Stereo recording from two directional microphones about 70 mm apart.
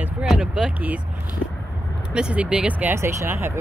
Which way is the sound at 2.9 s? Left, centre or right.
Right.